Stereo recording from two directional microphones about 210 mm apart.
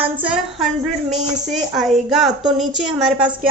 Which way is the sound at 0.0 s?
5° right (ahead or behind).